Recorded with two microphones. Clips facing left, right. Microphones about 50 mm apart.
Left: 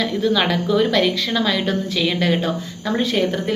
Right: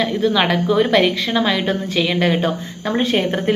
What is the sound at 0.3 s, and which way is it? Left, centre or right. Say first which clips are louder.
A woman's voice: right 1 dB; centre.